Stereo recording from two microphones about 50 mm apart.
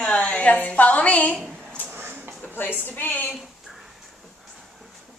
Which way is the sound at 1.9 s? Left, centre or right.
Right.